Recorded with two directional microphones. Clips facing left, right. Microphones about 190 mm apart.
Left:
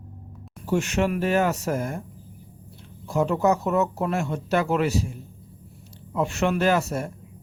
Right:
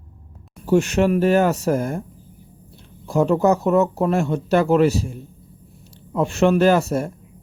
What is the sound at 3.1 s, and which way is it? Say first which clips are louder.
Speech: right 5 dB; 30° right (ahead or behind).